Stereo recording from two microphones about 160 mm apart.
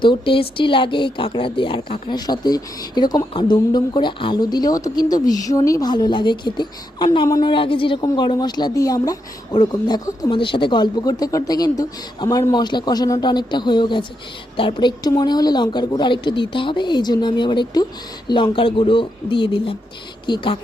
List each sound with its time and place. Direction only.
0.0 s speech: 30° left (ahead or behind)